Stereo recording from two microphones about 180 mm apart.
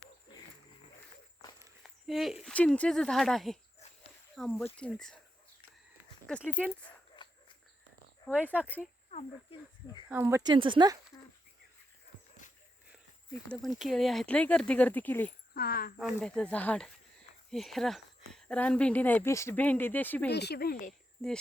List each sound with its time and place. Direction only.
1.8 s speech: centre (ahead or behind)
6.2 s speech: 5° left (ahead or behind)
7.2 s cricket: 25° left (ahead or behind)
8.3 s speech: 10° left (ahead or behind)
9.0 s speech: 35° left (ahead or behind)
10.1 s speech: 15° right (ahead or behind)
10.5 s speech: 25° right (ahead or behind)
11.1 s speech: 20° left (ahead or behind)
13.5 s speech: centre (ahead or behind)
15.5 s speech: 55° left (ahead or behind)
16.0 s speech: centre (ahead or behind)
20.3 s speech: 65° left (ahead or behind)